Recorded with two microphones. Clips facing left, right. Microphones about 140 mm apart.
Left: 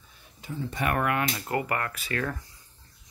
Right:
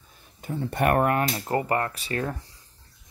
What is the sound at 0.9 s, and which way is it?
Speech, 40° right (ahead or behind).